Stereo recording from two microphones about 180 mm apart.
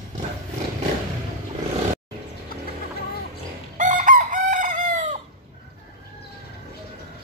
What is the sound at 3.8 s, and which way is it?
Chicken, 45° right (ahead or behind).